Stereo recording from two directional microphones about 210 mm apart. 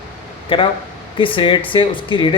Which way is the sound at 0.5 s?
25° left (ahead or behind).